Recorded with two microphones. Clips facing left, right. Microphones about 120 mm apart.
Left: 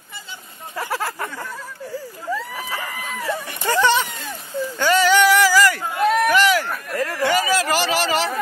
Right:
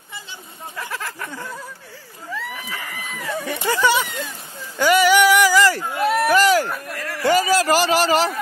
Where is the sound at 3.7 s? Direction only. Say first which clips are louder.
Left 2 dB; 10° right (ahead or behind).